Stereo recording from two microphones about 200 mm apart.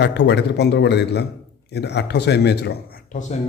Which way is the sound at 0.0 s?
60° left (ahead or behind).